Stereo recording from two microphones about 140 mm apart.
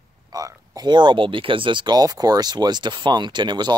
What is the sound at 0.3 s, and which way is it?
Speech, 30° right (ahead or behind).